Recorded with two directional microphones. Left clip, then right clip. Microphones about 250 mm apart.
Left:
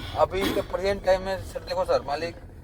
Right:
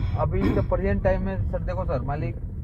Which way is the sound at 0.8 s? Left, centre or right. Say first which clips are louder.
Left 2 dB; left.